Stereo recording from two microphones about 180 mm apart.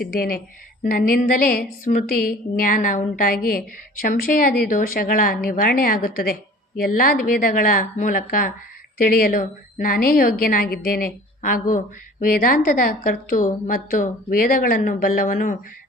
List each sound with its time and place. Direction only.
0.0 s a woman's voice: 55° left (ahead or behind)